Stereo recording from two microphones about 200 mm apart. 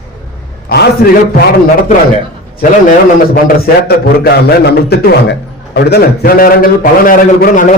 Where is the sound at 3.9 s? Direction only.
55° left (ahead or behind).